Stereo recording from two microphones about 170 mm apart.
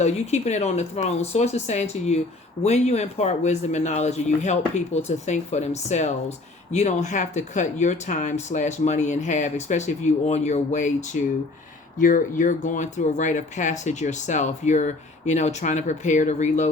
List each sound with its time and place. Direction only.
0.0 s speech: 40° left (ahead or behind)